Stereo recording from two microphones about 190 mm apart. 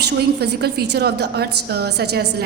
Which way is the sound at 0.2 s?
60° right (ahead or behind).